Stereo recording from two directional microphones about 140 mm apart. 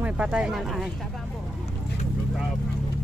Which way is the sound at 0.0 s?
5° right (ahead or behind).